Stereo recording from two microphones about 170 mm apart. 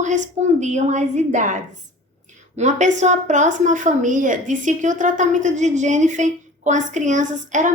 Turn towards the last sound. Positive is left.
turn(degrees=-50)  # may be behind; listen again after turning